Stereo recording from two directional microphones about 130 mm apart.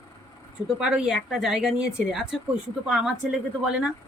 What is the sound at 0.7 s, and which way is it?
Speech, 5° right (ahead or behind).